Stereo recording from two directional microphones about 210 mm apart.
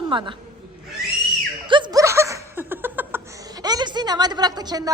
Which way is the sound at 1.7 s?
20° right (ahead or behind).